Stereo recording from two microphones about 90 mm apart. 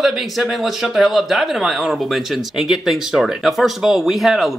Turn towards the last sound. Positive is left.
turn(degrees=0)  # may be behind; listen again after turning